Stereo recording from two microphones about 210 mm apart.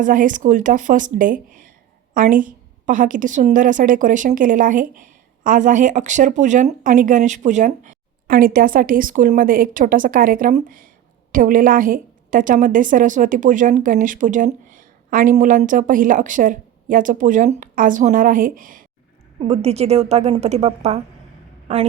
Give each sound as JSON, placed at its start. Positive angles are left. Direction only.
{"t": 0.0, "sound": "a woman's voice", "side_deg": -40}
{"t": 19.4, "sound": "a woman's voice", "side_deg": -30}